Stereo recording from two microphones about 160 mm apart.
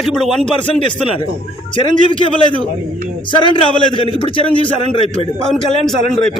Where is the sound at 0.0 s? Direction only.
Centre (ahead or behind).